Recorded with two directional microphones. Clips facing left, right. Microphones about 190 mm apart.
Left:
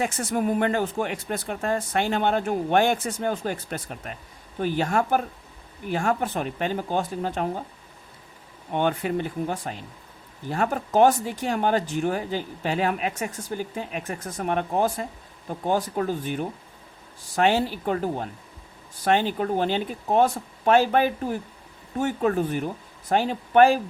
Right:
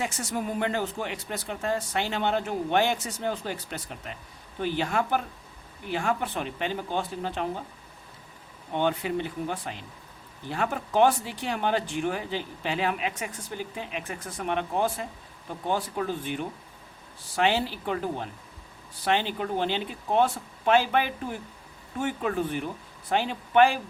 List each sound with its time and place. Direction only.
0.0 s speech: 55° left (ahead or behind)
8.7 s speech: 55° left (ahead or behind)